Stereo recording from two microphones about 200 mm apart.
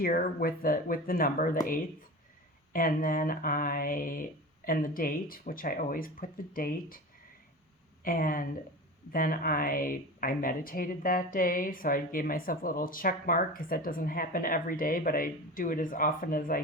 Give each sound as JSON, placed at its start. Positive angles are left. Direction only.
{"t": 0.0, "sound": "speech", "side_deg": 45}
{"t": 2.7, "sound": "speech", "side_deg": 45}
{"t": 8.0, "sound": "speech", "side_deg": 45}